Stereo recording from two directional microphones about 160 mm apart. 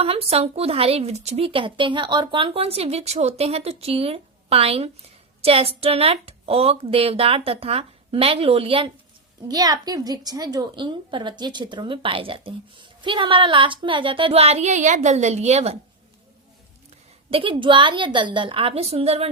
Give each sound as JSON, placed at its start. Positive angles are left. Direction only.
{"t": 0.0, "sound": "speech", "side_deg": -40}
{"t": 9.5, "sound": "speech", "side_deg": -25}
{"t": 17.3, "sound": "speech", "side_deg": -30}